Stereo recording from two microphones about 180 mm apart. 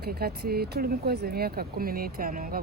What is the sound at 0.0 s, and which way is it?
Speech, 60° right (ahead or behind).